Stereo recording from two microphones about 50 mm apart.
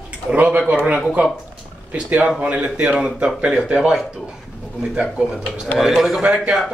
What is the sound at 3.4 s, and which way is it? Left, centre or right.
Speech, right.